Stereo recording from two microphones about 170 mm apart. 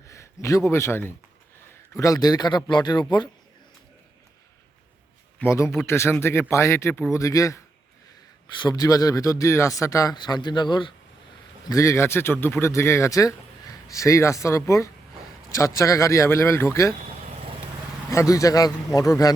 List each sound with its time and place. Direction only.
0.1 s a man's voice: 20° left (ahead or behind)
5.4 s speech: 15° left (ahead or behind)
8.6 s speech: 20° left (ahead or behind)
11.7 s speech: 20° left (ahead or behind)
18.1 s speech: 20° left (ahead or behind)